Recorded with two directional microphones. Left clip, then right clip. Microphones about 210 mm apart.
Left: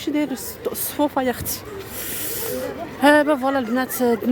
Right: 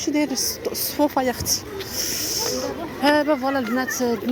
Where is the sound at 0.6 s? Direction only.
20° left (ahead or behind).